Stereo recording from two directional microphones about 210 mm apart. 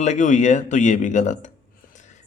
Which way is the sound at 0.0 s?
35° left (ahead or behind).